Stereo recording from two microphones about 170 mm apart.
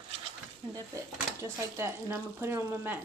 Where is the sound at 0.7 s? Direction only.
20° right (ahead or behind).